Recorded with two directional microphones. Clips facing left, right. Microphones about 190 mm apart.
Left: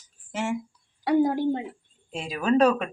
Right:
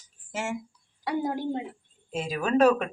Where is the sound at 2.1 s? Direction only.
Centre (ahead or behind).